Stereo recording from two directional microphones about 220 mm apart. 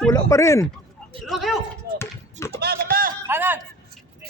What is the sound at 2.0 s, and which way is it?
Basketball bounce, 10° left (ahead or behind).